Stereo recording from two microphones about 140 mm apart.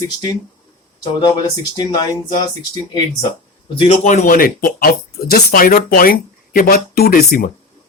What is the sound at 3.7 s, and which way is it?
Speech, 50° left (ahead or behind).